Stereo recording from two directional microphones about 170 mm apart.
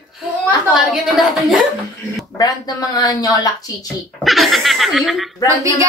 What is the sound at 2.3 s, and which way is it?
Speech, 20° left (ahead or behind).